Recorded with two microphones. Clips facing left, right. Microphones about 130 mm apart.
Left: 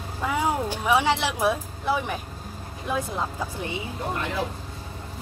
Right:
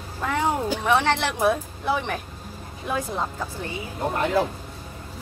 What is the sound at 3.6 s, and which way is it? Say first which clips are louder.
Speech: left 2 dB; 20° left (ahead or behind).